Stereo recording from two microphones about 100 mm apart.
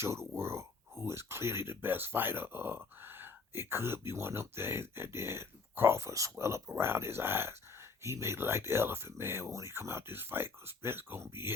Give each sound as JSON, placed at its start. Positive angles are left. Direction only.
{"t": 0.0, "sound": "speech", "side_deg": -25}